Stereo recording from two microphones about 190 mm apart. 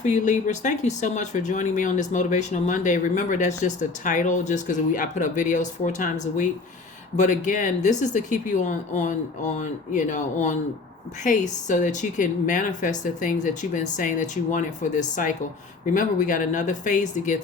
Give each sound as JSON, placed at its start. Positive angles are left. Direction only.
{"t": 0.0, "sound": "speech", "side_deg": 40}